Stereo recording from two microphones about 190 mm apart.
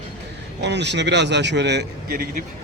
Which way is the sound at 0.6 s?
65° right (ahead or behind).